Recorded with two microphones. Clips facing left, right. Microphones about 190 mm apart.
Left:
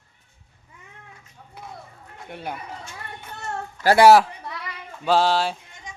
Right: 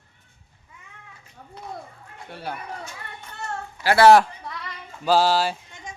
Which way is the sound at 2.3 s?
20° left (ahead or behind).